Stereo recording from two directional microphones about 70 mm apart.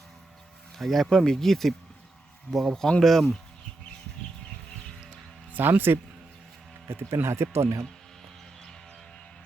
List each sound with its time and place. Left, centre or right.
0.8 s speech: centre
5.5 s speech: right